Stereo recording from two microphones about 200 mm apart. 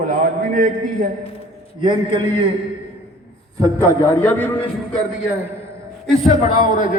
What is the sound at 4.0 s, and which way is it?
Speech, 10° left (ahead or behind).